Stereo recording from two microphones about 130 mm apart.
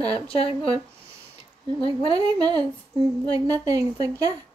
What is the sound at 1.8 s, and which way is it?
Speech, 35° right (ahead or behind).